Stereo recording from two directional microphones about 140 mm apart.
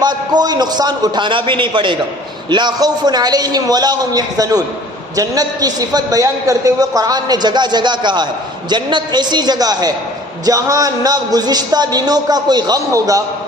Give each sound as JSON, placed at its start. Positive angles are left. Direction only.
{"t": 0.0, "sound": "a man's voice", "side_deg": -30}